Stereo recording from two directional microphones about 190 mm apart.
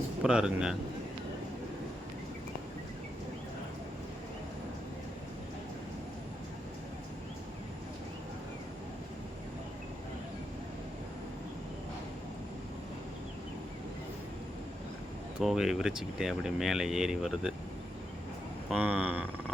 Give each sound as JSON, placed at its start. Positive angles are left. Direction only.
{"t": 0.2, "sound": "speech", "side_deg": -5}
{"t": 15.4, "sound": "speech", "side_deg": 0}
{"t": 18.7, "sound": "speech", "side_deg": -5}